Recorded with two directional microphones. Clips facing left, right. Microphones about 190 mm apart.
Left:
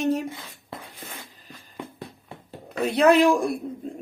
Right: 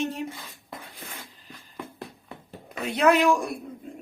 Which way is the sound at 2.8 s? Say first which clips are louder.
Left 3 dB; 35° left (ahead or behind).